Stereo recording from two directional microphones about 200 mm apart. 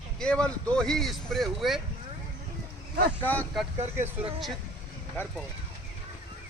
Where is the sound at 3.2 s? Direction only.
10° left (ahead or behind).